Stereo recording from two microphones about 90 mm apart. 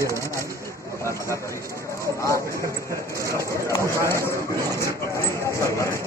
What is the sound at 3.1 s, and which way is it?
Speech, 35° left (ahead or behind).